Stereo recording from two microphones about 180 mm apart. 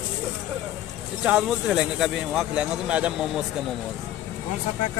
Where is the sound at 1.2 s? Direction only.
5° right (ahead or behind).